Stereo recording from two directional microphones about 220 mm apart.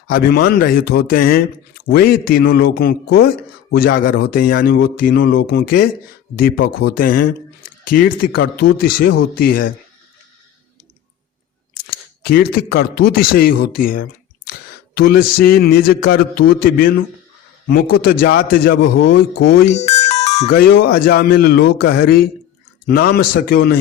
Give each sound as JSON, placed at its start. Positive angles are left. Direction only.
{"t": 0.1, "sound": "speech", "side_deg": 45}
{"t": 12.2, "sound": "speech", "side_deg": 45}
{"t": 19.9, "sound": "music", "side_deg": 30}
{"t": 20.5, "sound": "speech", "side_deg": 45}